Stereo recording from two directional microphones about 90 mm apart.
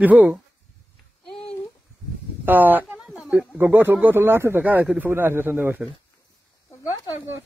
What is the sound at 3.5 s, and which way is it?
Speech, 25° right (ahead or behind).